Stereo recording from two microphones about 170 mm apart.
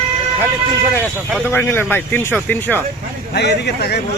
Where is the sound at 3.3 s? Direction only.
80° left.